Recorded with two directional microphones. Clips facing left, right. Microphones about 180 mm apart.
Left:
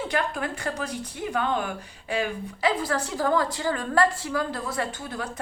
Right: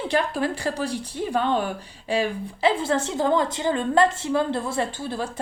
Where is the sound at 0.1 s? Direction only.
30° right (ahead or behind).